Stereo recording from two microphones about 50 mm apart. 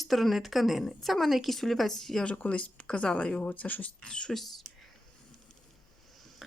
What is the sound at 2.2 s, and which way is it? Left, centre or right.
Speech, left.